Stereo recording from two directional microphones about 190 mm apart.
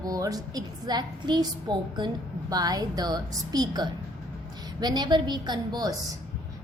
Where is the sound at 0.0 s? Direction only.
20° right (ahead or behind).